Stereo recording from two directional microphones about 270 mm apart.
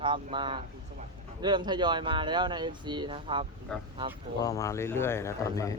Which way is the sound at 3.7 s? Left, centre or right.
Centre.